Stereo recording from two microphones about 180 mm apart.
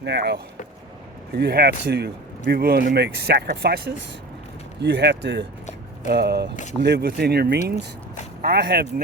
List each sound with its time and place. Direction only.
0.0 s speech: 70° right (ahead or behind)
1.4 s speech: 65° right (ahead or behind)
6.1 s speech: 65° right (ahead or behind)